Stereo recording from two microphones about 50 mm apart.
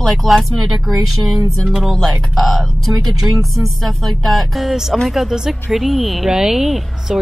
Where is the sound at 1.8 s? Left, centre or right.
Centre.